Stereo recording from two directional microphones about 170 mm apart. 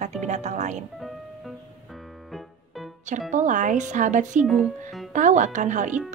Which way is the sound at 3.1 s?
50° right (ahead or behind).